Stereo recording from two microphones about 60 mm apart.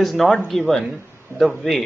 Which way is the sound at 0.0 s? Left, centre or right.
Centre.